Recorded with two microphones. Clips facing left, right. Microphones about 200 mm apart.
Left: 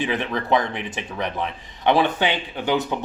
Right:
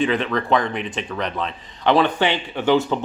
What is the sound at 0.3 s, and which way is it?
Speech, 20° left (ahead or behind).